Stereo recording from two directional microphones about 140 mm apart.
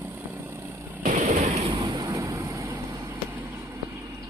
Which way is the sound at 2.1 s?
20° right (ahead or behind).